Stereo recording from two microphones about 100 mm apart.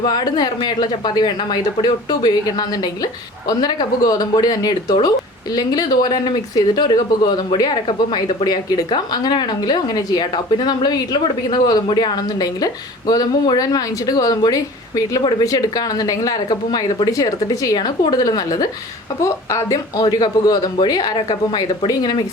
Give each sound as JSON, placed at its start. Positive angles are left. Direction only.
{"t": 0.0, "sound": "a woman's voice", "side_deg": 45}
{"t": 20.1, "sound": "a woman's voice", "side_deg": 45}